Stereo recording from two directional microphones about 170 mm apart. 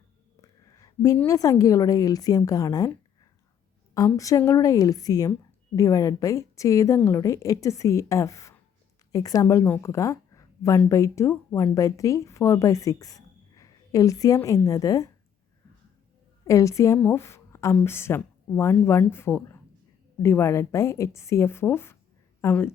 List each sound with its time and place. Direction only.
0.4 s a sound: 20° left (ahead or behind)
1.3 s a woman's voice: 20° left (ahead or behind)
3.9 s a woman's voice: 20° left (ahead or behind)
16.5 s a woman's voice: 20° left (ahead or behind)